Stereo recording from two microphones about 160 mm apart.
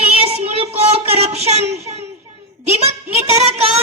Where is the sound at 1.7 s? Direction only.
40° right (ahead or behind).